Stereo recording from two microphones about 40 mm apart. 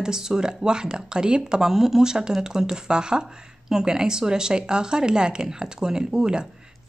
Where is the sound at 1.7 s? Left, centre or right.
Centre.